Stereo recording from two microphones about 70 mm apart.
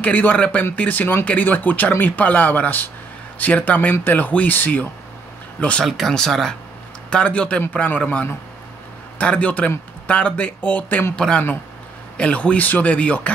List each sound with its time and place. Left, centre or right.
0.0 s a man's voice: left
5.9 s a man's voice: centre